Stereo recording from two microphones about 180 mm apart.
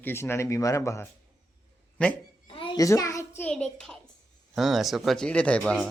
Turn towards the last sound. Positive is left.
turn(degrees=0)  # may be behind; listen again after turning